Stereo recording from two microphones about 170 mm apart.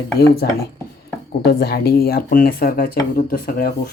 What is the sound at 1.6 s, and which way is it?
Speech, 65° left (ahead or behind).